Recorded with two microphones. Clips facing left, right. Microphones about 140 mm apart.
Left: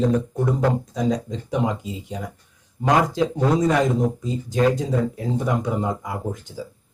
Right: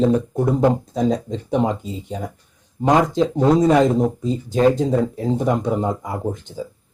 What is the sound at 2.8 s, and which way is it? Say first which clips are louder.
Speech: right 3 dB; 20° right (ahead or behind).